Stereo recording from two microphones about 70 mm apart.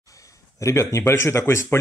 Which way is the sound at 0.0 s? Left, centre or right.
Left.